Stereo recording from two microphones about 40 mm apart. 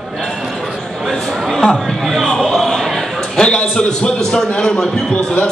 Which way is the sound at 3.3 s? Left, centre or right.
Left.